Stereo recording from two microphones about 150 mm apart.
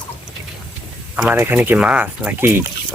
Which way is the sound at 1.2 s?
15° right (ahead or behind).